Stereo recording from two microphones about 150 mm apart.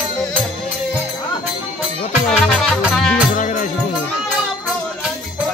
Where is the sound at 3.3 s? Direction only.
55° left (ahead or behind).